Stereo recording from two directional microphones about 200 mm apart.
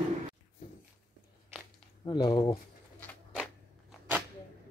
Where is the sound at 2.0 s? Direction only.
20° left (ahead or behind).